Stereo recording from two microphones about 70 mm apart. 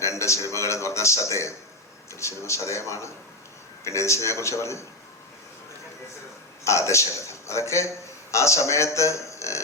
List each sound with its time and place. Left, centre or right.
0.0 s a man's voice: left
6.7 s a man's voice: left